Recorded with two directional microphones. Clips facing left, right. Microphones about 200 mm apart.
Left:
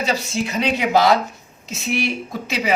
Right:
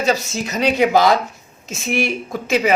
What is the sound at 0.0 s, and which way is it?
A man's voice, 45° right (ahead or behind).